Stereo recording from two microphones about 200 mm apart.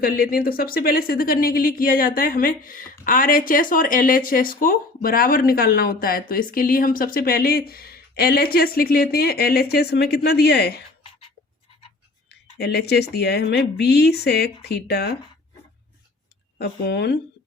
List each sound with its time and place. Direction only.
0.0 s speech: 50° left (ahead or behind)
12.5 s a woman's voice: 55° left (ahead or behind)
16.6 s a woman's voice: 55° left (ahead or behind)